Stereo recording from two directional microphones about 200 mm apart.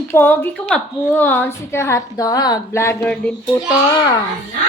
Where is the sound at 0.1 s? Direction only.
10° left (ahead or behind).